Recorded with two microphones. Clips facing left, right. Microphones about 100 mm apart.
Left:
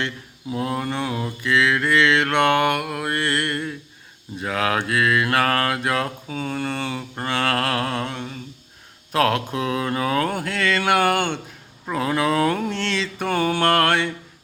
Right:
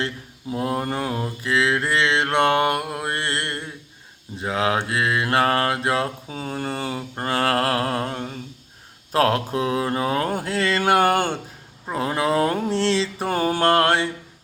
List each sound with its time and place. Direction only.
0.5 s mantra: 35° right (ahead or behind)